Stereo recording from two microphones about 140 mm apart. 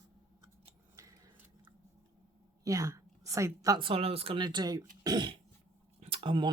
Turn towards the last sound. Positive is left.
turn(degrees=-40)  # may be behind; listen again after turning